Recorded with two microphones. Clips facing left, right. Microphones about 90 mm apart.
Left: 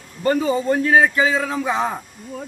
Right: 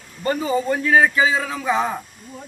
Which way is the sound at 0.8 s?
35° left (ahead or behind).